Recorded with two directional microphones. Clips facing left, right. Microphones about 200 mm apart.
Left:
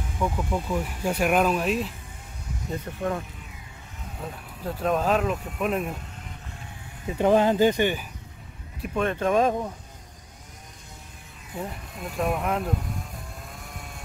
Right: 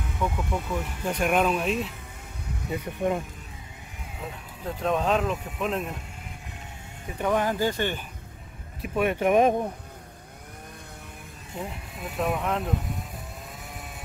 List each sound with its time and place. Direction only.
0.2 s speech: 5° left (ahead or behind)
2.7 s speech: 15° right (ahead or behind)
4.2 s speech: centre (ahead or behind)
7.1 s speech: 30° left (ahead or behind)
8.8 s speech: 10° right (ahead or behind)
11.5 s speech: centre (ahead or behind)